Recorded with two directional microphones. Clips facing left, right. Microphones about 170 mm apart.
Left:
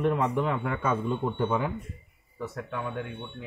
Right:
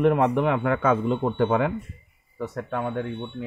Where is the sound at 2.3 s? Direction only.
60° right (ahead or behind).